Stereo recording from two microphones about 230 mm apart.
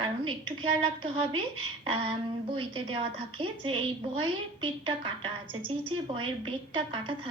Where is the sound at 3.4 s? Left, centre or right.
Right.